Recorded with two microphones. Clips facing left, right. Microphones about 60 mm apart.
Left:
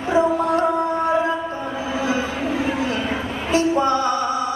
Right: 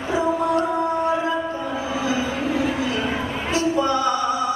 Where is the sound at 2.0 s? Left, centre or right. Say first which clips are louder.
Left 2 dB; left.